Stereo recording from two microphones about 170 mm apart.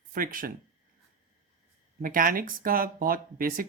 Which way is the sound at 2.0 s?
55° right (ahead or behind).